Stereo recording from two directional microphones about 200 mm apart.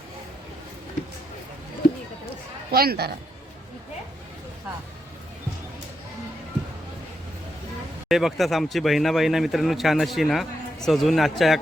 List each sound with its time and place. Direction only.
2.7 s a man's voice: 50° right (ahead or behind)
8.1 s speech: centre (ahead or behind)